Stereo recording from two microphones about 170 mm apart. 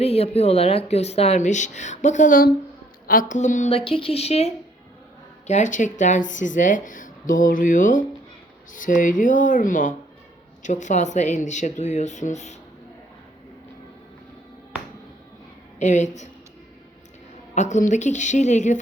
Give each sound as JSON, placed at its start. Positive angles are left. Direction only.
{"t": 0.0, "sound": "speech", "side_deg": 35}
{"t": 15.8, "sound": "speech", "side_deg": 45}
{"t": 17.5, "sound": "speech", "side_deg": 45}